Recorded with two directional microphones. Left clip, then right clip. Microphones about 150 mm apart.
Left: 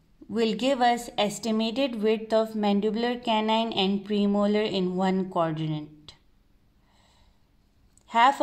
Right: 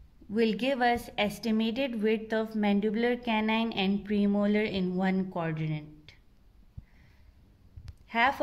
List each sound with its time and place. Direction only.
0.3 s a woman's voice: 25° left (ahead or behind)